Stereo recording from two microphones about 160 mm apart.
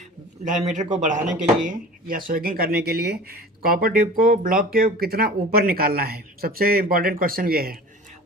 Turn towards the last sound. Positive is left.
turn(degrees=-70)  # may be behind; listen again after turning